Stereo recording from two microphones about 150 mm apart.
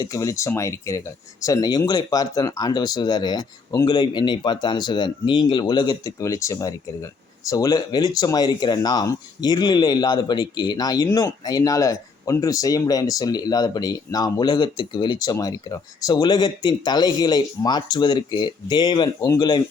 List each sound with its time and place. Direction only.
0.0 s speech: 20° left (ahead or behind)